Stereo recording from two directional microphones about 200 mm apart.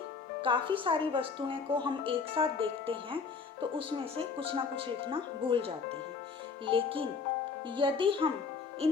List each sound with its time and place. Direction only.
0.4 s speech: 25° right (ahead or behind)
8.8 s music: 30° right (ahead or behind)